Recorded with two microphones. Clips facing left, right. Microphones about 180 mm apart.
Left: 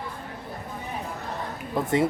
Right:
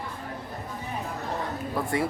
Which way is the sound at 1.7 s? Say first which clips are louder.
Left 5 dB; 20° left (ahead or behind).